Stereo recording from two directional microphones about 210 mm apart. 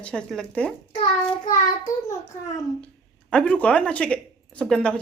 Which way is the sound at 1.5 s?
15° left (ahead or behind).